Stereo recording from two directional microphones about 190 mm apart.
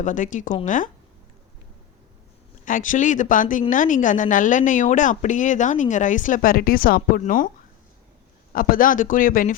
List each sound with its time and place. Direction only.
0.0 s speech: 40° left (ahead or behind)
2.6 s a woman's voice: 45° left (ahead or behind)
8.5 s a woman's voice: 50° left (ahead or behind)